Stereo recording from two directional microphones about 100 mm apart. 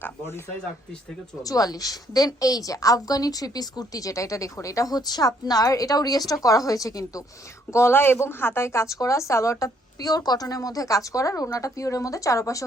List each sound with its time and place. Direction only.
1.4 s a woman's voice: 35° left (ahead or behind)